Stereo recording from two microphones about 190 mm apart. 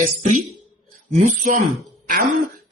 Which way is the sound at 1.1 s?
40° right (ahead or behind).